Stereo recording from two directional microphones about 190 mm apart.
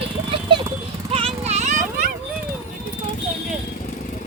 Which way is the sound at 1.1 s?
30° right (ahead or behind).